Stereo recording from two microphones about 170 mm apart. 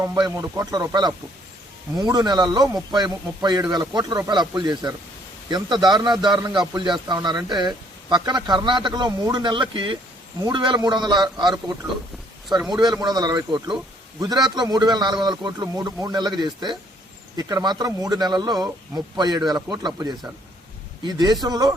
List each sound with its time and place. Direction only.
0.0 s a man's voice: 15° right (ahead or behind)
12.5 s a man's voice: centre (ahead or behind)
12.7 s a man's voice: 25° right (ahead or behind)
21.0 s a man's voice: 25° right (ahead or behind)